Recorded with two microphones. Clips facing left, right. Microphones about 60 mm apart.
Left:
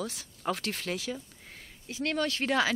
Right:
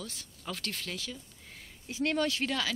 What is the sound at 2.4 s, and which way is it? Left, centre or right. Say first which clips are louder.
Speech: left 6 dB; left.